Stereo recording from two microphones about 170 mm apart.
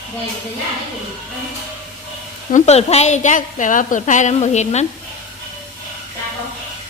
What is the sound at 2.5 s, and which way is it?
A woman's voice, 40° left (ahead or behind).